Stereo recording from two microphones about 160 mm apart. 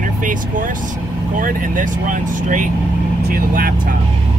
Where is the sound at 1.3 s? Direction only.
55° right (ahead or behind).